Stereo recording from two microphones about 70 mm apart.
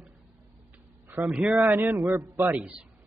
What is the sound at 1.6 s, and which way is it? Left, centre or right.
Speech, right.